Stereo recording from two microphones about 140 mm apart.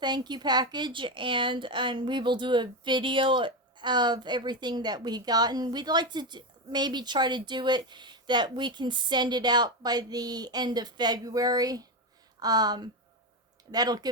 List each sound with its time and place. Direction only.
0.0 s a woman's voice: 30° right (ahead or behind)